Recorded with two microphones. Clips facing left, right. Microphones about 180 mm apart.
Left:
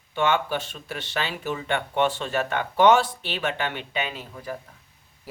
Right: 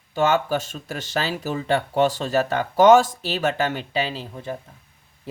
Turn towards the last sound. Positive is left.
turn(degrees=-25)  # may be behind; listen again after turning